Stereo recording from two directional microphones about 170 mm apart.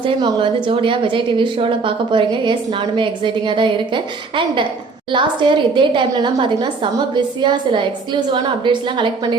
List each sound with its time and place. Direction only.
0.0 s a woman's voice: 30° right (ahead or behind)